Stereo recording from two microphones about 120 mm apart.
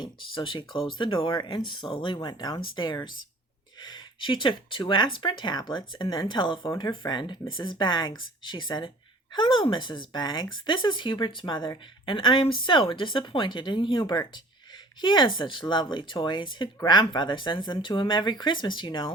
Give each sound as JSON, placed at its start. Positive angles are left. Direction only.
{"t": 0.0, "sound": "speech", "side_deg": 45}